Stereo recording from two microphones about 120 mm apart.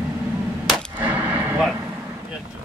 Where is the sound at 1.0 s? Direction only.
15° right (ahead or behind).